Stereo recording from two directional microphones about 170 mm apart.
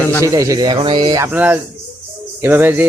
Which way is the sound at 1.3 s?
10° right (ahead or behind).